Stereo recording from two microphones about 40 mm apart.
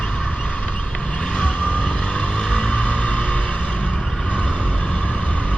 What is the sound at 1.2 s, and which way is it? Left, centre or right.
Vehicle, left.